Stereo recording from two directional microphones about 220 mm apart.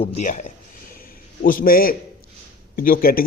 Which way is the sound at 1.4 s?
40° left (ahead or behind).